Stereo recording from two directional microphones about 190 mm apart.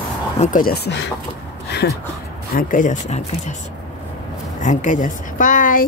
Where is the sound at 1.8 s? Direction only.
90° left.